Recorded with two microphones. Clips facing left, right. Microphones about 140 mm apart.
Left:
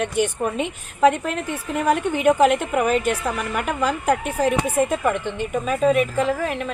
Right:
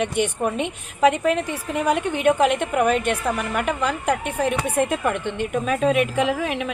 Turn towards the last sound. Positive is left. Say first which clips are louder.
# even
turn(degrees=-5)  # may be behind; listen again after turning